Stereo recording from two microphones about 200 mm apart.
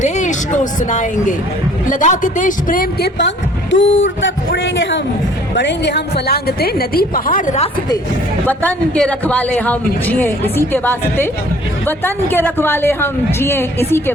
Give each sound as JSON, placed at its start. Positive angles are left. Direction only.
{"t": 0.0, "sound": "a woman's voice", "side_deg": 40}
{"t": 8.4, "sound": "speech", "side_deg": 5}